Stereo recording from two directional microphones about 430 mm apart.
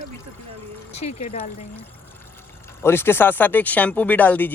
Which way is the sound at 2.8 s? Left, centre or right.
Centre.